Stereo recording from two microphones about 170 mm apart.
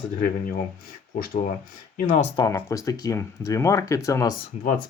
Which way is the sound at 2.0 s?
45° left (ahead or behind).